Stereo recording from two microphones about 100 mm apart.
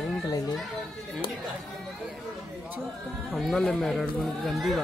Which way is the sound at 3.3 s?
5° left (ahead or behind).